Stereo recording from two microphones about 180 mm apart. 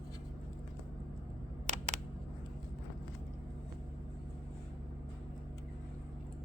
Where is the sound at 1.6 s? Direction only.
40° right (ahead or behind).